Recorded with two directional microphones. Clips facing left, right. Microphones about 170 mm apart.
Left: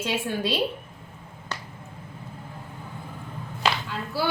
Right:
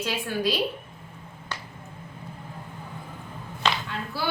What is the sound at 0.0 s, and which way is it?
Speech, 25° left (ahead or behind).